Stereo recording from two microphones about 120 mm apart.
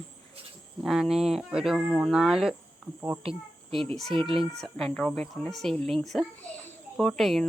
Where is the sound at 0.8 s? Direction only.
5° right (ahead or behind).